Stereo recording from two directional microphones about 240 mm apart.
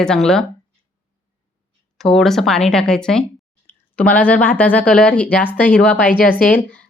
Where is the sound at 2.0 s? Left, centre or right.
Centre.